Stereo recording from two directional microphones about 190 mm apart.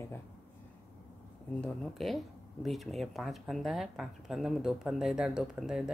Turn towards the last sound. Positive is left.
turn(degrees=-5)  # may be behind; listen again after turning